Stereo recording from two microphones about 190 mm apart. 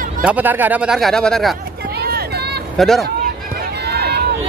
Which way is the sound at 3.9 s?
60° right (ahead or behind).